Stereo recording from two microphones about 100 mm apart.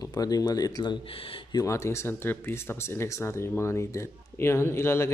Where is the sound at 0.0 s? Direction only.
40° left (ahead or behind).